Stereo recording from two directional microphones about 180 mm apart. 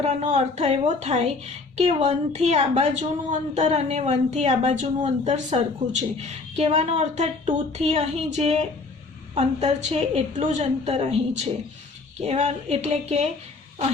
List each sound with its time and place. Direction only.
0.0 s a woman's voice: 40° right (ahead or behind)